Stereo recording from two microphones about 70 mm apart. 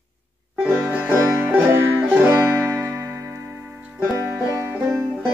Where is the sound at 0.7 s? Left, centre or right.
Right.